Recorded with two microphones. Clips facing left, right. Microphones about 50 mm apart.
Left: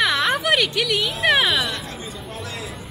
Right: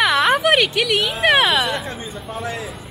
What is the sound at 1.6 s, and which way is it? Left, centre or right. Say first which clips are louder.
Speech: right 4 dB; centre.